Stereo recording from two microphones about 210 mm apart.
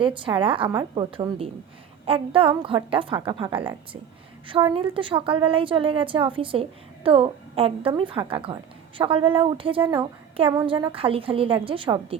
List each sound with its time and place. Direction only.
0.0 s a woman's voice: 25° right (ahead or behind)